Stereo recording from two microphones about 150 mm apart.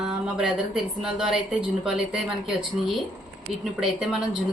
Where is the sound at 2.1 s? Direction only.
Centre (ahead or behind).